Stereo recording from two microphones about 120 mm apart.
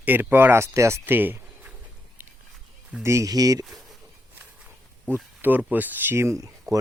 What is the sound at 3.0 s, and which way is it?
Speech, 25° right (ahead or behind).